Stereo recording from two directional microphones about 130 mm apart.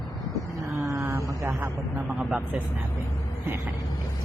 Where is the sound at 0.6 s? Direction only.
25° right (ahead or behind).